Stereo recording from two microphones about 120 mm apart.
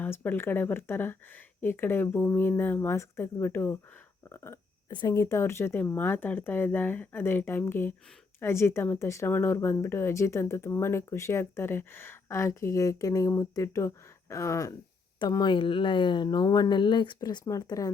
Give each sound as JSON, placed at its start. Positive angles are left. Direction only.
{"t": 0.0, "sound": "speech", "side_deg": 15}
{"t": 4.9, "sound": "speech", "side_deg": 40}
{"t": 5.1, "sound": "speech", "side_deg": 25}
{"t": 15.2, "sound": "speech", "side_deg": 35}